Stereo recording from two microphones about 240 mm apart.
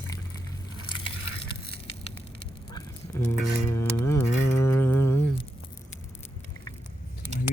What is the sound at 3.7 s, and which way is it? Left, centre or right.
Music, centre.